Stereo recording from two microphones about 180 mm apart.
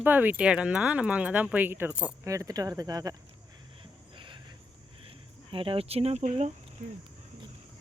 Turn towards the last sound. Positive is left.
turn(degrees=-45)  # may be behind; listen again after turning